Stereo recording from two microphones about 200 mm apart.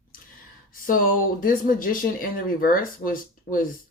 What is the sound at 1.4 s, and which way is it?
A woman's voice, 45° left (ahead or behind).